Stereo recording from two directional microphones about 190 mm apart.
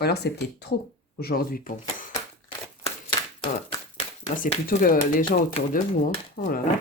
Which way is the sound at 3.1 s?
25° left (ahead or behind).